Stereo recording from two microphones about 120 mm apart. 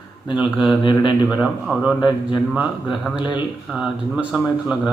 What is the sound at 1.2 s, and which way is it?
Speech, 5° right (ahead or behind).